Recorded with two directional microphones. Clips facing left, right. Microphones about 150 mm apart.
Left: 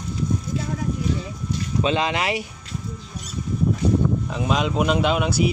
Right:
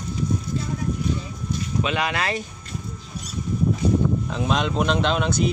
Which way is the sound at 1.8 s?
25° left (ahead or behind).